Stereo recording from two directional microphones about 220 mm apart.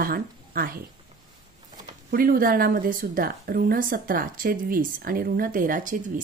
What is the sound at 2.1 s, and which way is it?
Speech, 40° right (ahead or behind).